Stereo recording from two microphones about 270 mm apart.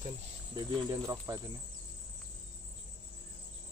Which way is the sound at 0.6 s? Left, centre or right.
Centre.